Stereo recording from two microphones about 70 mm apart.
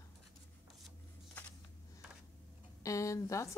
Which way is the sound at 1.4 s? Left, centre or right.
Left.